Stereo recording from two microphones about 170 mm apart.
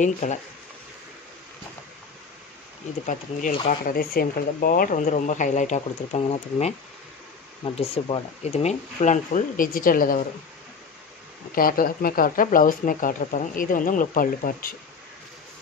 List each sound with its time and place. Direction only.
0.0 s speech: 45° left (ahead or behind)
3.6 s speech: 55° left (ahead or behind)
11.5 s speech: 55° left (ahead or behind)